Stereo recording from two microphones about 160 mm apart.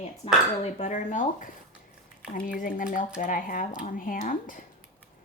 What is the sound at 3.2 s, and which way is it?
A woman's voice, 60° left (ahead or behind).